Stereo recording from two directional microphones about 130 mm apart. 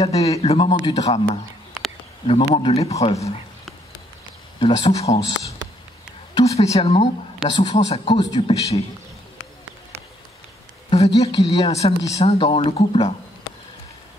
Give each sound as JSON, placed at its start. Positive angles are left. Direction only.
{"t": 0.0, "sound": "speech", "side_deg": 50}
{"t": 4.6, "sound": "speech", "side_deg": 50}
{"t": 6.4, "sound": "speech", "side_deg": 50}
{"t": 8.4, "sound": "speech", "side_deg": 50}
{"t": 10.9, "sound": "speech", "side_deg": 50}